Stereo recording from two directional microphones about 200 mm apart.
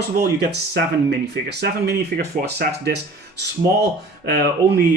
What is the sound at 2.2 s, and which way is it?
Speech, 55° right (ahead or behind).